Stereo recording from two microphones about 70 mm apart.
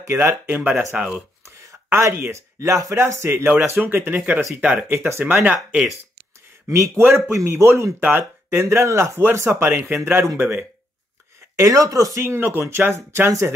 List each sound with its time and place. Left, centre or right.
0.0 s speech: right
0.5 s speech: right
1.6 s speech: right
4.8 s speech: right
5.4 s speech: centre
6.7 s speech: right
8.0 s speech: right
8.5 s speech: right
11.5 s speech: right
12.2 s speech: right